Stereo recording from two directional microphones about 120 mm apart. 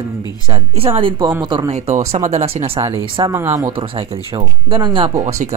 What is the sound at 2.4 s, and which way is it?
Speech, 55° right (ahead or behind).